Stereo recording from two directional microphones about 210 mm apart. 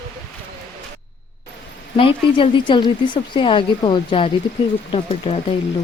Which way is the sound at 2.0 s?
25° left (ahead or behind).